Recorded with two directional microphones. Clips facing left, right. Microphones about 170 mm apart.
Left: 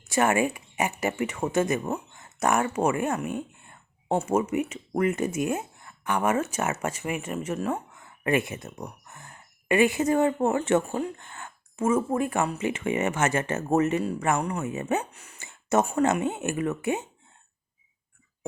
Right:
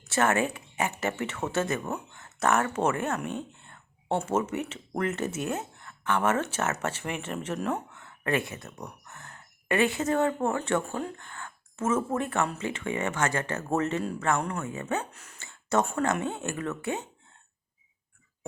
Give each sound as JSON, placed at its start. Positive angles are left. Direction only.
{"t": 0.0, "sound": "speech", "side_deg": 15}